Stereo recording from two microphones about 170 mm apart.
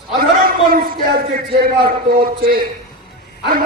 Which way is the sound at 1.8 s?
60° right (ahead or behind).